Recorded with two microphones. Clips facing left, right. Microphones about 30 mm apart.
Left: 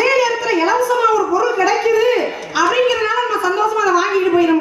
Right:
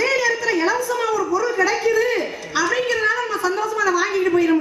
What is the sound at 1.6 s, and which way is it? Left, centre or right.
Speech, left.